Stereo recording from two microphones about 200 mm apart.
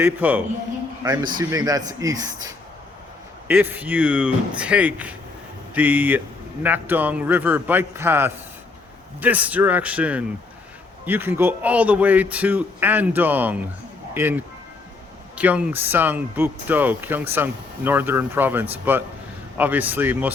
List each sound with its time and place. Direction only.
0.0 s a man's voice: 10° right (ahead or behind)